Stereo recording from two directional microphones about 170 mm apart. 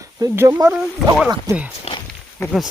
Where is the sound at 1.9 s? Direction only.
35° left (ahead or behind).